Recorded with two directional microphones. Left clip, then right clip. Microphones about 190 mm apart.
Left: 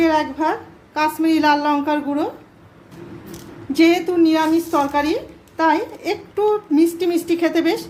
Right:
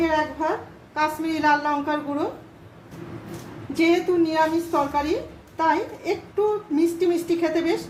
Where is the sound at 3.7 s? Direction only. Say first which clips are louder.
Left 5 dB; 50° left (ahead or behind).